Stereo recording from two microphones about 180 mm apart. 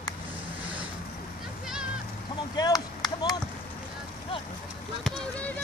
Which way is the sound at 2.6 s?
20° left (ahead or behind).